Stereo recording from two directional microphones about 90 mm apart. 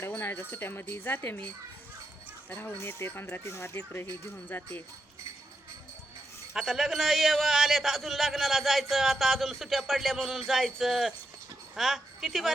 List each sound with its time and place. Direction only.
0.2 s speech: 25° left (ahead or behind)
2.5 s speech: 20° left (ahead or behind)
6.5 s a man's voice: 5° right (ahead or behind)